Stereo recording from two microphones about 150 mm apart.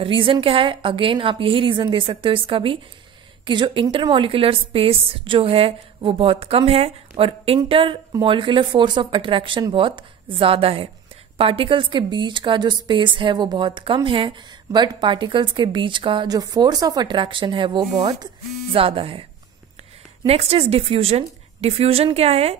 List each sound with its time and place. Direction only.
0.0 s a woman's voice: 35° right (ahead or behind)
20.2 s a woman's voice: 40° right (ahead or behind)